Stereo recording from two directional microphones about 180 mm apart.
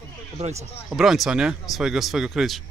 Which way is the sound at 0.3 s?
35° right (ahead or behind).